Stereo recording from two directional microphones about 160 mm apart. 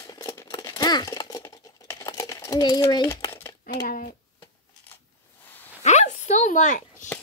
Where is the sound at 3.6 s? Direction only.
60° left (ahead or behind).